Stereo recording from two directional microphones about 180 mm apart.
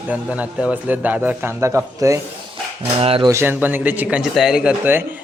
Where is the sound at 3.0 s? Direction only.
30° right (ahead or behind).